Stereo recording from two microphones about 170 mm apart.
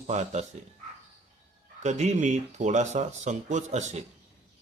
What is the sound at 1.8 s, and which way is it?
Speech, 45° right (ahead or behind).